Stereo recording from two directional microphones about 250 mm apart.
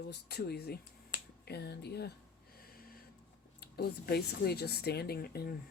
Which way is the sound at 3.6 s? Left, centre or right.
Left.